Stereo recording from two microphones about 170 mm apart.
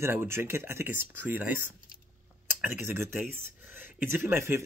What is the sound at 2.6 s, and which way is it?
Speech, 10° right (ahead or behind).